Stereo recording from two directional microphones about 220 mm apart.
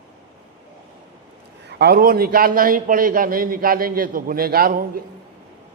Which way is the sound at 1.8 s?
45° right (ahead or behind).